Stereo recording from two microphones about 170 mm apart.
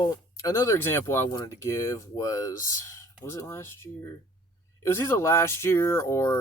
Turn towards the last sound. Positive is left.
turn(degrees=15)  # may be behind; listen again after turning